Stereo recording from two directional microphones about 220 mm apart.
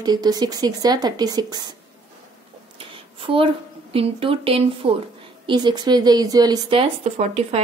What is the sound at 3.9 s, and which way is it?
A woman's voice, 25° right (ahead or behind).